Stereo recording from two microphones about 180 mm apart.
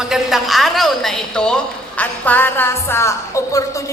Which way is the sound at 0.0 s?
Centre (ahead or behind).